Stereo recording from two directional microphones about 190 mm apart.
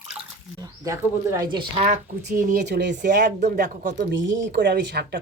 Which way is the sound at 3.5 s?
45° right (ahead or behind).